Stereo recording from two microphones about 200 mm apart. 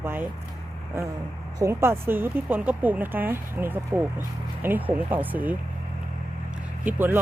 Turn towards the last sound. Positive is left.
turn(degrees=-10)  # may be behind; listen again after turning